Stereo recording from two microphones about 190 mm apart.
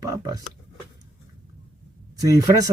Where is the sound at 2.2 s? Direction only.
20° right (ahead or behind).